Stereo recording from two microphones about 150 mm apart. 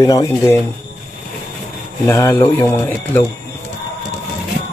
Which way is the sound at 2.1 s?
20° left (ahead or behind).